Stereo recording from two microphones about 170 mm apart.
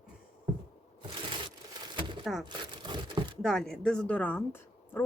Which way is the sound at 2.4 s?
25° right (ahead or behind).